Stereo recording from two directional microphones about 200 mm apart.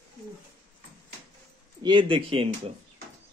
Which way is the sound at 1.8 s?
25° right (ahead or behind).